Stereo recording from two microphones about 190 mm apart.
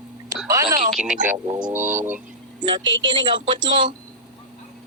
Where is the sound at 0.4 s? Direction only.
15° right (ahead or behind).